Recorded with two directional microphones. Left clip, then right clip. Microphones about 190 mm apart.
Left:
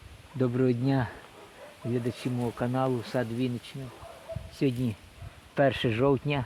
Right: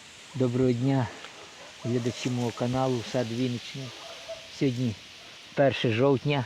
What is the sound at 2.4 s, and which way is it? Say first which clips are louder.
Speech: right 1 dB; 25° right (ahead or behind).